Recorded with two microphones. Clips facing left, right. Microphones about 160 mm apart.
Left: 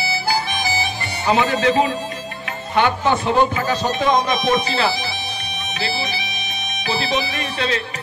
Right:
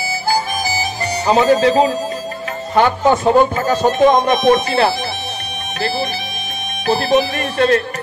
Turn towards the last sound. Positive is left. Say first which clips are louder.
# right 8 dB
turn(degrees=-50)  # may be behind; listen again after turning